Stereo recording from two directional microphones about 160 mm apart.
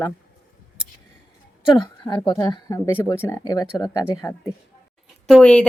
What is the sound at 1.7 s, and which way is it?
Speech, 30° left (ahead or behind).